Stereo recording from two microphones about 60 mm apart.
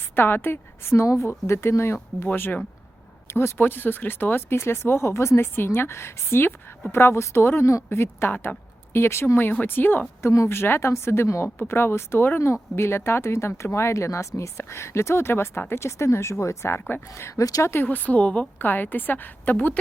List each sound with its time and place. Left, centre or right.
0.2 s a woman's voice: left
3.2 s speech: left
3.6 s a woman's voice: left
7.9 s speech: left
9.5 s speech: left
10.3 s a woman's voice: left
17.2 s a woman's voice: left
17.8 s a woman's voice: left